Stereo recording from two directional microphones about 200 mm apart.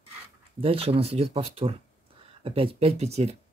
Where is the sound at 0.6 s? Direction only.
30° right (ahead or behind).